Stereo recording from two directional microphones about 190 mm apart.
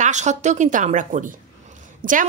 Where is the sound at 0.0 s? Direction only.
40° right (ahead or behind).